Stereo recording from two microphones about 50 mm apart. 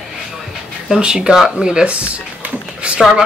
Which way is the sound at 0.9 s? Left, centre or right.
Centre.